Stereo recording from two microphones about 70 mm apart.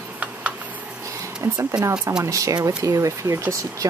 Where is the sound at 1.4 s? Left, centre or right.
Right.